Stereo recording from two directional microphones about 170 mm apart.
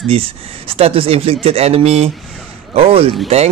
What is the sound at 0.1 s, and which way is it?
Speech, 35° right (ahead or behind).